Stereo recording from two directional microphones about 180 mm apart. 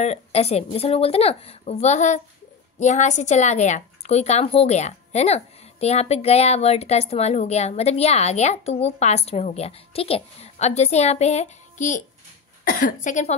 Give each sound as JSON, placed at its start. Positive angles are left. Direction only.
{"t": 0.0, "sound": "a woman's voice", "side_deg": 35}